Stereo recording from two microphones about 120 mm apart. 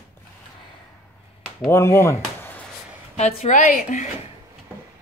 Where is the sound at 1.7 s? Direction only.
25° left (ahead or behind).